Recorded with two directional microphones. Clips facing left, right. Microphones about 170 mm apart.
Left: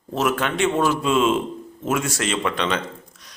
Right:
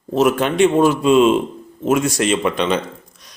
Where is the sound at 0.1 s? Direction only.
20° right (ahead or behind).